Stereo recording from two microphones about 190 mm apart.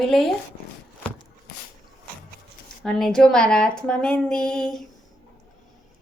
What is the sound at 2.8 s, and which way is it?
Speech, centre (ahead or behind).